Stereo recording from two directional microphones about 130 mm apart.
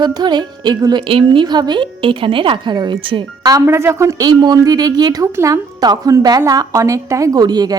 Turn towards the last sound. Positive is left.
turn(degrees=-30)  # may be behind; listen again after turning